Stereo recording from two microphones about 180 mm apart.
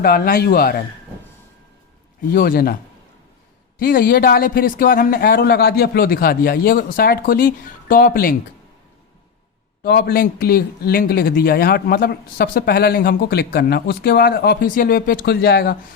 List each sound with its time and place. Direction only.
0.0 s a man's voice: 60° left (ahead or behind)
2.3 s a man's voice: 55° left (ahead or behind)
3.8 s a man's voice: 55° left (ahead or behind)
9.8 s a man's voice: 60° left (ahead or behind)